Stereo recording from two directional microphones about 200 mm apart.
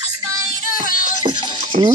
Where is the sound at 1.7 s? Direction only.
40° right (ahead or behind).